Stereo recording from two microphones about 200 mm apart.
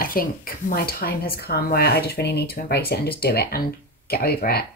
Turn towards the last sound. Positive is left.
turn(degrees=50)  # may be behind; listen again after turning